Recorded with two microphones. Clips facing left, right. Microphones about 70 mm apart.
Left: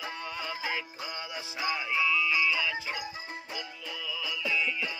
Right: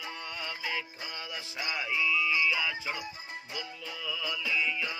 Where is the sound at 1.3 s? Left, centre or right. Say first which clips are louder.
Left 4 dB; centre.